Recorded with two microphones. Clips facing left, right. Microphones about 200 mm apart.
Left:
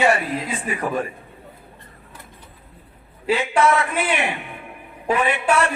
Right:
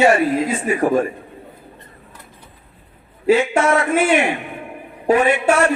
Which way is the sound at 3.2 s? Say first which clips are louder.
Right 4 dB; 45° right (ahead or behind).